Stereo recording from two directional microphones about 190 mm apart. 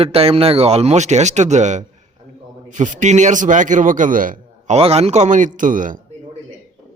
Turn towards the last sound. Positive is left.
turn(degrees=-45)  # may be behind; listen again after turning